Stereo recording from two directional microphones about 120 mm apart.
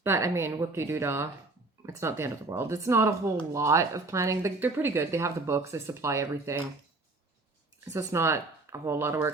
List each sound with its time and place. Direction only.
0.0 s speech: 20° right (ahead or behind)
7.9 s speech: 20° right (ahead or behind)